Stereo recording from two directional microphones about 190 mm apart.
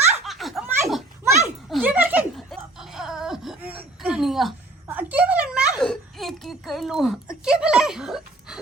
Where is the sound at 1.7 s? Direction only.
10° right (ahead or behind).